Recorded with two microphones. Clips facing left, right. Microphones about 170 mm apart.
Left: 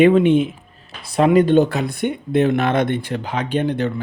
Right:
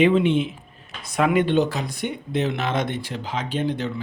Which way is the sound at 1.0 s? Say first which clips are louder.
Left 6 dB; 30° left (ahead or behind).